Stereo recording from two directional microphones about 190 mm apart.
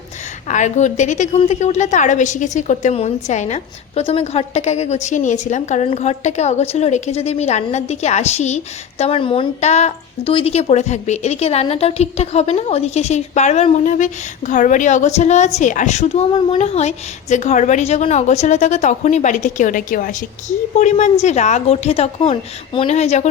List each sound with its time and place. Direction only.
0.4 s a woman's voice: 40° left (ahead or behind)